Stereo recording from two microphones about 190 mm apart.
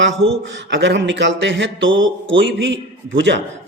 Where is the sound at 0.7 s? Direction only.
65° right (ahead or behind).